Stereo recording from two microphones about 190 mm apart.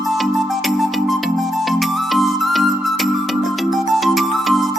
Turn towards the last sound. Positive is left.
turn(degrees=0)  # may be behind; listen again after turning